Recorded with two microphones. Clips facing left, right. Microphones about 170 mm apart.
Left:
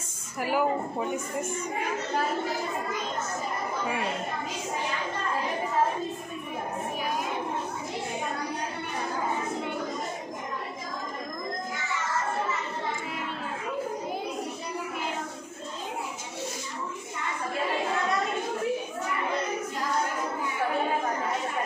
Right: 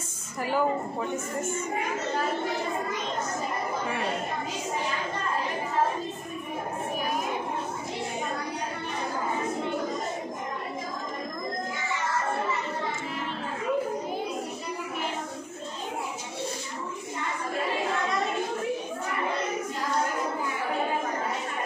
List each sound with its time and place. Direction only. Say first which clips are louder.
0.4 s a woman's voice: even; 10° left (ahead or behind)
1.1 s a woman's voice: right 1 dB; 25° right (ahead or behind)